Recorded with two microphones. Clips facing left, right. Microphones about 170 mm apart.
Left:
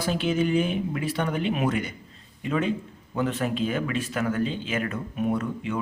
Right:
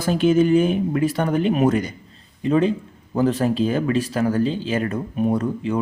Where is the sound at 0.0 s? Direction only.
45° right (ahead or behind).